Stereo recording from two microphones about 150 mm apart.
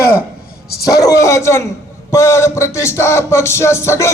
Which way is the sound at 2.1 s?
20° left (ahead or behind).